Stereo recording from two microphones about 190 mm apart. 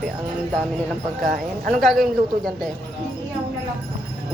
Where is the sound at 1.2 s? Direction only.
45° right (ahead or behind).